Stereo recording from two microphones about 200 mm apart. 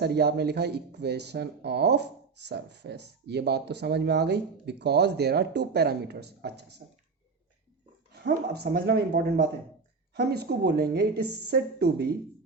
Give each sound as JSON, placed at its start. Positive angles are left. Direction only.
{"t": 0.0, "sound": "speech", "side_deg": -55}
{"t": 8.1, "sound": "speech", "side_deg": -55}